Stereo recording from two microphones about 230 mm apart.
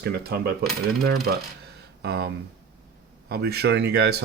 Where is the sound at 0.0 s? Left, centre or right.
Right.